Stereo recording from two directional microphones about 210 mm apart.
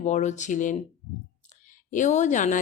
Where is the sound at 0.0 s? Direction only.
35° left (ahead or behind).